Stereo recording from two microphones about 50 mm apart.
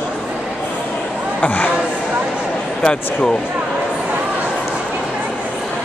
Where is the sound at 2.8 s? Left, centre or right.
Centre.